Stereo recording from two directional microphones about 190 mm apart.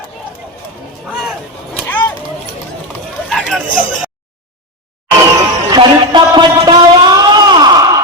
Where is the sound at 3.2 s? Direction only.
Centre (ahead or behind).